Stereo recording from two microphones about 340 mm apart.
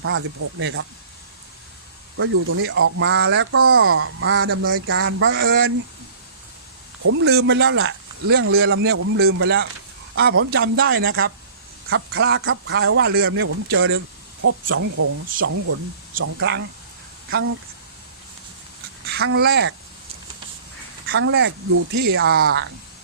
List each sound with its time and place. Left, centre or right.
0.0 s speech: right
2.1 s speech: right
7.0 s speech: right
19.0 s speech: right
21.1 s speech: right